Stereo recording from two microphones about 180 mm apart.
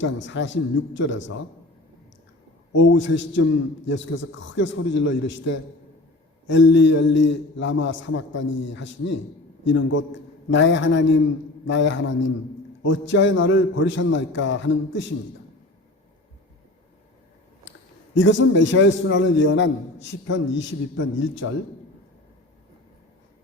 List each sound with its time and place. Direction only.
0.0 s a man's voice: 90° left
2.7 s a man's voice: 90° left
17.7 s a man's voice: 90° left